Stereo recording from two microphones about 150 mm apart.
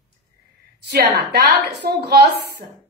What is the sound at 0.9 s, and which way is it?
A woman's voice, 90° right.